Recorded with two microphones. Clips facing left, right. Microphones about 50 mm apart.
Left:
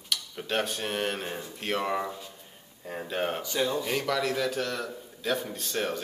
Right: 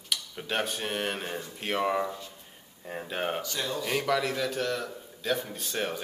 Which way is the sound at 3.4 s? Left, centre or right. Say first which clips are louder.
Left 4 dB; centre.